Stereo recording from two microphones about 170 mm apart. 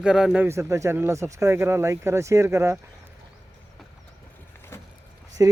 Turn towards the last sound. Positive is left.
turn(degrees=-20)  # may be behind; listen again after turning